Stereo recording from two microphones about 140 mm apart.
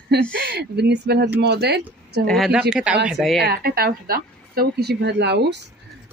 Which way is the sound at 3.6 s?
90° right.